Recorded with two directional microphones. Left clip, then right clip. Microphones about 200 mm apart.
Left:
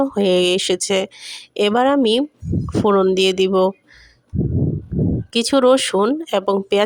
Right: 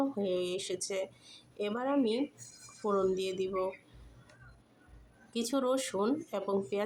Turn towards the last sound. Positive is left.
turn(degrees=45)  # may be behind; listen again after turning